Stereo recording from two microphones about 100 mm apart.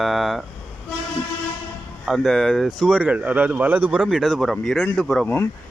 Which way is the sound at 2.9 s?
15° right (ahead or behind).